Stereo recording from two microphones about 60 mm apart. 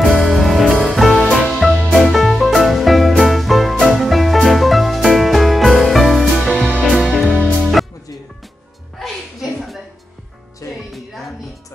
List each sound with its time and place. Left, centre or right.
0.0 s music: centre
10.6 s music: left